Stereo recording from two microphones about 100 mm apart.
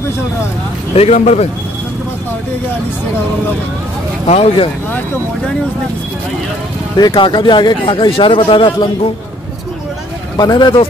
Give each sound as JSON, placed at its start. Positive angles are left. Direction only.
{"t": 0.9, "sound": "speech", "side_deg": 90}
{"t": 4.3, "sound": "speech", "side_deg": 90}
{"t": 7.0, "sound": "speech", "side_deg": 50}
{"t": 10.3, "sound": "speech", "side_deg": 40}